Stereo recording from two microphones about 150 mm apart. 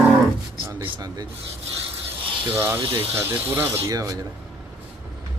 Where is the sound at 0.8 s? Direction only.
30° right (ahead or behind).